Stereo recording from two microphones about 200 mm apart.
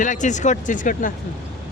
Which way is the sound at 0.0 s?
40° left (ahead or behind).